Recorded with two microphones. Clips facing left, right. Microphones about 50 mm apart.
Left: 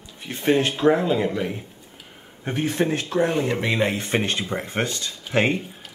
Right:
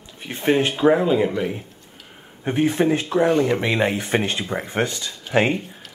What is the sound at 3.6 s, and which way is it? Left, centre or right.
Speech, right.